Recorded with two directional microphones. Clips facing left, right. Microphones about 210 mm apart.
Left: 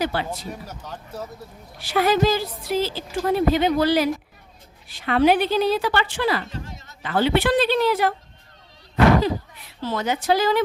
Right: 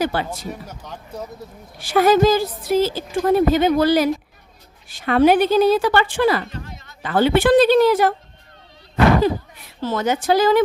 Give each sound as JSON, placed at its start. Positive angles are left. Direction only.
{"t": 0.0, "sound": "a woman's voice", "side_deg": -50}
{"t": 1.8, "sound": "a woman's voice", "side_deg": -45}
{"t": 9.8, "sound": "a woman's voice", "side_deg": -45}